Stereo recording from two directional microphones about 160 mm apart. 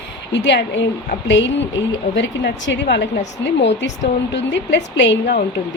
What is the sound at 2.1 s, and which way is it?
A woman's voice, 90° left.